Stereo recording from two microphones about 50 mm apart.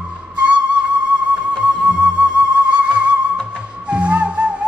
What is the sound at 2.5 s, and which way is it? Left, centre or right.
Music, right.